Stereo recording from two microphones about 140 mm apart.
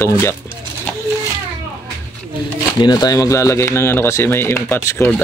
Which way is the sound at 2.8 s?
30° left (ahead or behind).